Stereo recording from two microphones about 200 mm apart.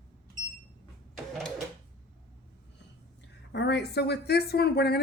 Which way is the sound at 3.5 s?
60° left (ahead or behind).